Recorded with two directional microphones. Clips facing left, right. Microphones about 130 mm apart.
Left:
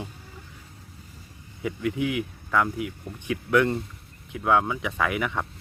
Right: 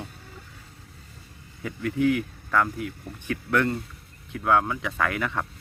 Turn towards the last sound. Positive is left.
turn(degrees=15)  # may be behind; listen again after turning